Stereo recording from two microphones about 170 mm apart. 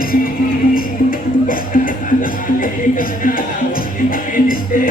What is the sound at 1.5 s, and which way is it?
Music, 55° left (ahead or behind).